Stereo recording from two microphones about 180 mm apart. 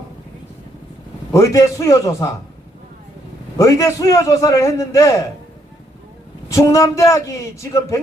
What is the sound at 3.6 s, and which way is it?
A man's voice, 15° left (ahead or behind).